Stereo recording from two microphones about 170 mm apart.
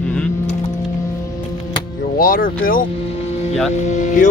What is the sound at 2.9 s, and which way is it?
Vehicle, 35° left (ahead or behind).